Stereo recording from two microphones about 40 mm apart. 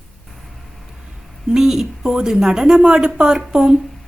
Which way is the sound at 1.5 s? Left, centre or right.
Centre.